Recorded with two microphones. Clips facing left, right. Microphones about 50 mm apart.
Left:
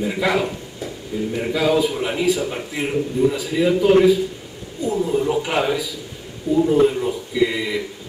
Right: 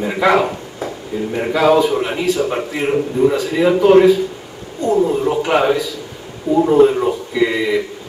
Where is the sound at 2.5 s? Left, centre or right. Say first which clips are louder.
Right 6 dB; right.